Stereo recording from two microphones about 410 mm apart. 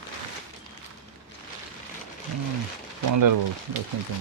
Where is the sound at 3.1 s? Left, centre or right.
Right.